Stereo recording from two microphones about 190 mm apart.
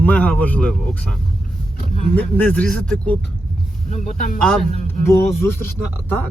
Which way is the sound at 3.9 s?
40° left (ahead or behind).